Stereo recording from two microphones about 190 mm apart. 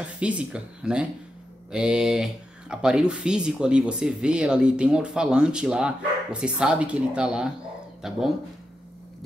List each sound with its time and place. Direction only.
0.0 s speech: 5° right (ahead or behind)